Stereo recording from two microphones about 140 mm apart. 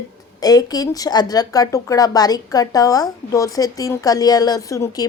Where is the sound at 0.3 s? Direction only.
25° left (ahead or behind).